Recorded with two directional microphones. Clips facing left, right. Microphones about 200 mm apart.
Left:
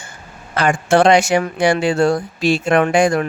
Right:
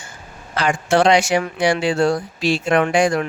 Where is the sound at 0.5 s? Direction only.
55° left (ahead or behind).